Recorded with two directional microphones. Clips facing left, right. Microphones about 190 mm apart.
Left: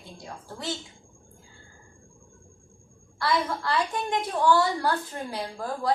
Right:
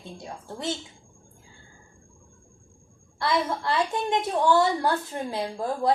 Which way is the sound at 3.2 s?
20° right (ahead or behind).